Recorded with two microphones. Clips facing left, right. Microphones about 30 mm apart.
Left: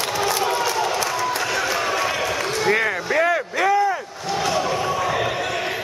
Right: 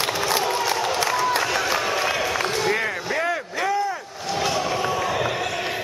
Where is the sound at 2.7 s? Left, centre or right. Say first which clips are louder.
Left 4 dB; centre.